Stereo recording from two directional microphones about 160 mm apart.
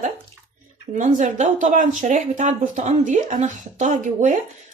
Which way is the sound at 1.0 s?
50° right (ahead or behind).